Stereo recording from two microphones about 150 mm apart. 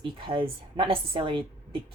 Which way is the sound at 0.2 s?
35° right (ahead or behind).